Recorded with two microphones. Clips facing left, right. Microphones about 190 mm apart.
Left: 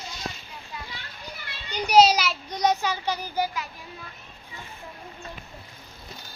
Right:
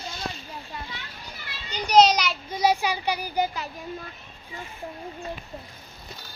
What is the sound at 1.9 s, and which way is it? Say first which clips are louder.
Speech: even; 5° left (ahead or behind).